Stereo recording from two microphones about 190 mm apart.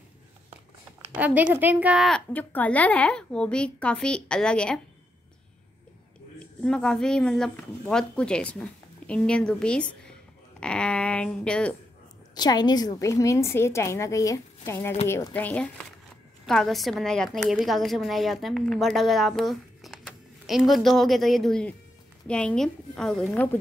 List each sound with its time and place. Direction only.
1.1 s a woman's voice: 10° right (ahead or behind)
6.4 s a woman's voice: 5° left (ahead or behind)
12.4 s a woman's voice: 20° left (ahead or behind)